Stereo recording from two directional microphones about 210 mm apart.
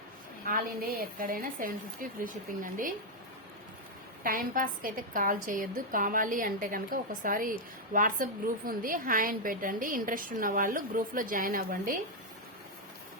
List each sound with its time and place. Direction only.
0.4 s a woman's voice: 45° right (ahead or behind)
4.2 s a woman's voice: 40° right (ahead or behind)